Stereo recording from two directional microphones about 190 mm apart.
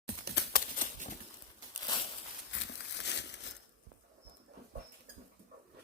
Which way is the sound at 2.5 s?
70° left (ahead or behind).